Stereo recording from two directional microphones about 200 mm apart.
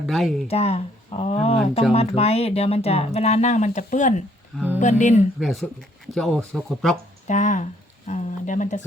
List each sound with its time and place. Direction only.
0.0 s speech: centre (ahead or behind)
0.4 s speech: 30° left (ahead or behind)
5.4 s speech: centre (ahead or behind)
7.3 s speech: 35° left (ahead or behind)
8.0 s a sound: 35° left (ahead or behind)